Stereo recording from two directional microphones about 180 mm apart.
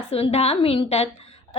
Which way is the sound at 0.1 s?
35° left (ahead or behind).